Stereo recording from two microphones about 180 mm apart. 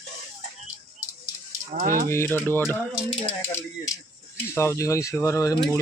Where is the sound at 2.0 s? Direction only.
15° left (ahead or behind).